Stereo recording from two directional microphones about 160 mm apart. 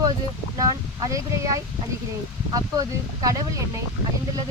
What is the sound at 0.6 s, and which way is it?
Speech, 20° right (ahead or behind).